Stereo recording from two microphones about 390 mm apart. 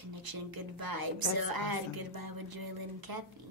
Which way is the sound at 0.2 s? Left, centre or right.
Right.